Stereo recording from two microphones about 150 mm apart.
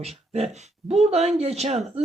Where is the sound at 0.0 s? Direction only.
45° right (ahead or behind).